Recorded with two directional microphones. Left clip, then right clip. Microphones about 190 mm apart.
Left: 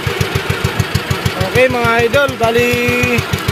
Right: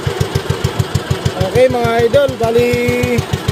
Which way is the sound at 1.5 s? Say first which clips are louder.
Even; 10° right (ahead or behind).